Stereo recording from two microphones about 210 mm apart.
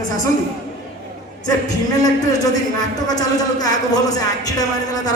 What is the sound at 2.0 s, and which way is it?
A man's voice, 20° left (ahead or behind).